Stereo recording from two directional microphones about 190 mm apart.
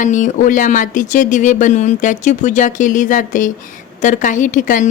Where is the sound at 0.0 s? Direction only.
40° left (ahead or behind).